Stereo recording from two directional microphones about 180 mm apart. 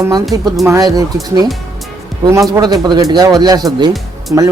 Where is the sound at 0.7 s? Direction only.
20° right (ahead or behind).